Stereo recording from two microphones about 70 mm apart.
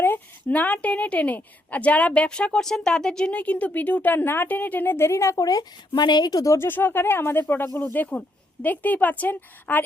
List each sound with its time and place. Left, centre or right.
0.0 s a woman's voice: left
6.6 s speech: left
7.9 s a woman's voice: centre